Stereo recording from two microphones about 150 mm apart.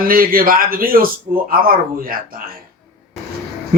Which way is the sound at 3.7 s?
70° right (ahead or behind).